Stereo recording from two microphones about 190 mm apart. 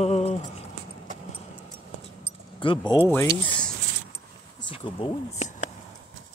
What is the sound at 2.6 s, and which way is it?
Speech, 25° left (ahead or behind).